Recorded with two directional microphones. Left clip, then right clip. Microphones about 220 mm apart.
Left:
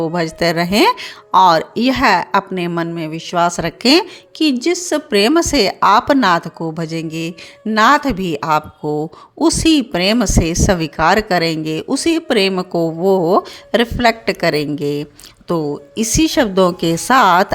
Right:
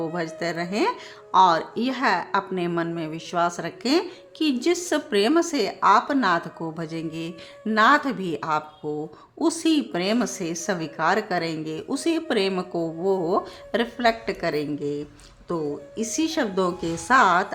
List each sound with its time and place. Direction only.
0.0 s speech: 30° left (ahead or behind)